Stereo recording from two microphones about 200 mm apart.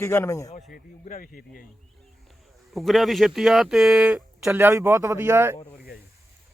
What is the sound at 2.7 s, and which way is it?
Speech, centre (ahead or behind).